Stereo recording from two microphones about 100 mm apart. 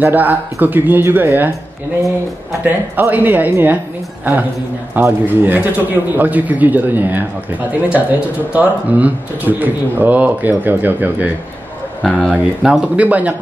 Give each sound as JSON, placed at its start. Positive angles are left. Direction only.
{"t": 0.0, "sound": "a woman's voice", "side_deg": -20}
{"t": 2.6, "sound": "a woman's voice", "side_deg": -20}
{"t": 8.5, "sound": "speech", "side_deg": -15}
{"t": 12.0, "sound": "speech", "side_deg": 0}
{"t": 12.9, "sound": "speech", "side_deg": -15}